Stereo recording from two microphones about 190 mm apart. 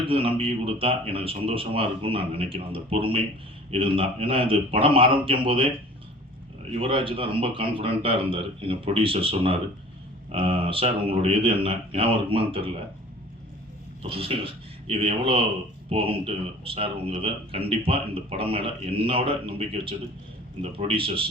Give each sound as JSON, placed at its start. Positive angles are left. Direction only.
{"t": 0.0, "sound": "speech", "side_deg": -30}
{"t": 6.7, "sound": "speech", "side_deg": -30}
{"t": 14.0, "sound": "speech", "side_deg": -30}